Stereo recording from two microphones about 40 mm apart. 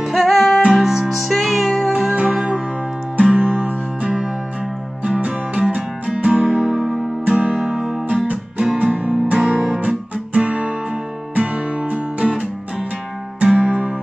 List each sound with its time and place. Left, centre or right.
0.0 s music: centre
0.7 s music: centre
1.1 s music: centre
1.9 s music: centre
3.3 s music: right
6.8 s music: centre
7.2 s music: right
8.7 s music: right
9.5 s guitar: right
11.3 s music: right